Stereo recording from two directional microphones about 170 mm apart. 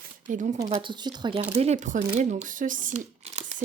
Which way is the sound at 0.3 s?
45° right (ahead or behind).